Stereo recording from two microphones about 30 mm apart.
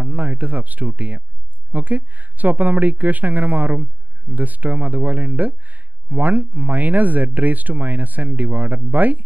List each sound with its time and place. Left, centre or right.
0.0 s a woman's voice: right